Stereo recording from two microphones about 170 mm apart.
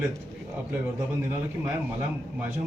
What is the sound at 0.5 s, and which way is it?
A man's voice, 15° right (ahead or behind).